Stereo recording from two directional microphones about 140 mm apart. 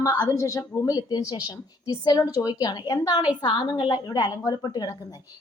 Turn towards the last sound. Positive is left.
turn(degrees=30)  # may be behind; listen again after turning